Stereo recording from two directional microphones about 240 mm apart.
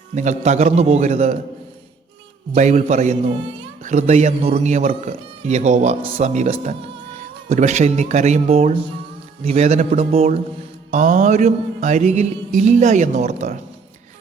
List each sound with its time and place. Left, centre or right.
0.1 s mantra: right
2.6 s mantra: right